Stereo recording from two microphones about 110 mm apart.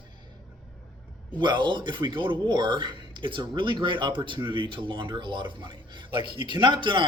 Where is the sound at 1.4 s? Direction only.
45° right (ahead or behind).